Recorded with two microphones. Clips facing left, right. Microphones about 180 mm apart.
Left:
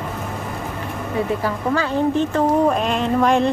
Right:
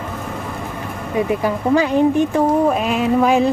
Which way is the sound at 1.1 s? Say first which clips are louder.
Right 4 dB; 15° right (ahead or behind).